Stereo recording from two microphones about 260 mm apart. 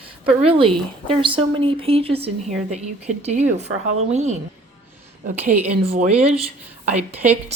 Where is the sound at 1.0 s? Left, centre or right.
Centre.